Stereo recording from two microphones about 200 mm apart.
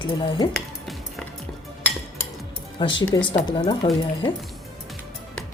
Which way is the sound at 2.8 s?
25° left (ahead or behind).